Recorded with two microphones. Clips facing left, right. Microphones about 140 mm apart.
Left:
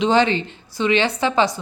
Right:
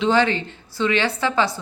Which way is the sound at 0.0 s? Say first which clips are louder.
Left 2 dB; 20° left (ahead or behind).